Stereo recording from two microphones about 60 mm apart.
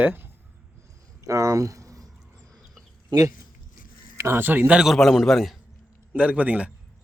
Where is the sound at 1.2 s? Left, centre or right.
Right.